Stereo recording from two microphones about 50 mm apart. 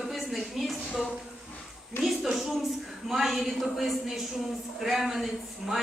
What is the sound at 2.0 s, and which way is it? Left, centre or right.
Speech, centre.